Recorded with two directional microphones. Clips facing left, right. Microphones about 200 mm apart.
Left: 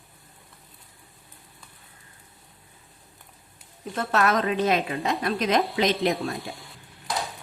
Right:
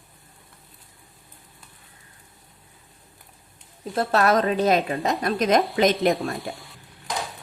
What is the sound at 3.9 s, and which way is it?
A woman's voice, 35° right (ahead or behind).